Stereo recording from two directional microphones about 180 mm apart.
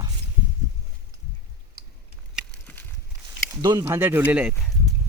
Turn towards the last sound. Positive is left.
turn(degrees=-5)  # may be behind; listen again after turning